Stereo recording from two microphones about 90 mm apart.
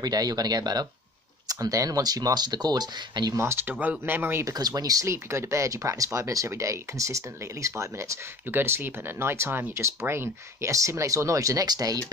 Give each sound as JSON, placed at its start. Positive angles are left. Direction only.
{"t": 0.0, "sound": "speech", "side_deg": -45}
{"t": 3.3, "sound": "speech", "side_deg": -30}
{"t": 4.5, "sound": "speech", "side_deg": -45}